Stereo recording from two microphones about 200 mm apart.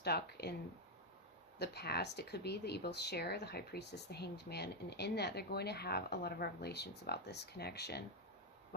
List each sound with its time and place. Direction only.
0.0 s speech: 55° left (ahead or behind)
1.5 s speech: 55° left (ahead or behind)